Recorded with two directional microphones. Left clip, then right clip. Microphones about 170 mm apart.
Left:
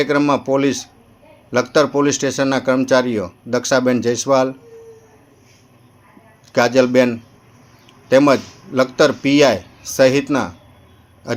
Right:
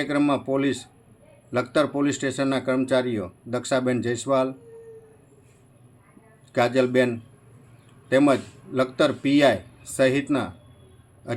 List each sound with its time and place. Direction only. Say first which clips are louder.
0.0 s a man's voice: left 7 dB; 10° left (ahead or behind)
6.5 s a man's voice: left 7 dB; 10° left (ahead or behind)